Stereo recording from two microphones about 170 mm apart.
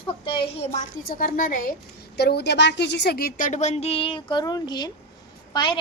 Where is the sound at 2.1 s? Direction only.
75° left (ahead or behind).